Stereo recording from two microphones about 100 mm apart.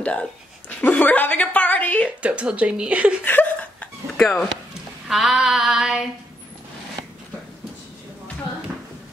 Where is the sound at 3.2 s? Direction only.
15° left (ahead or behind).